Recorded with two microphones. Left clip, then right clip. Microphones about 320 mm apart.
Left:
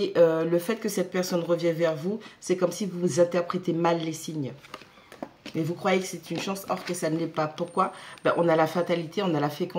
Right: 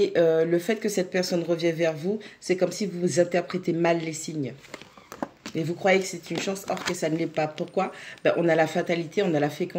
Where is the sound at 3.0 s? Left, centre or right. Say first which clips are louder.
Even; left.